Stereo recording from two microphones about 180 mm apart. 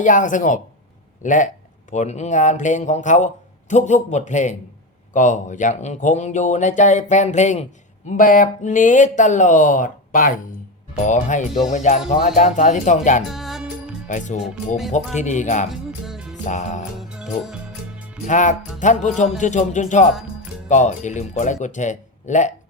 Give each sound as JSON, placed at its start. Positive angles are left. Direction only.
{"t": 0.0, "sound": "speech", "side_deg": 45}
{"t": 13.2, "sound": "music", "side_deg": 0}
{"t": 14.1, "sound": "speech", "side_deg": 45}
{"t": 15.7, "sound": "music", "side_deg": 0}
{"t": 16.5, "sound": "speech", "side_deg": 40}
{"t": 17.0, "sound": "music", "side_deg": -5}
{"t": 18.3, "sound": "speech", "side_deg": 45}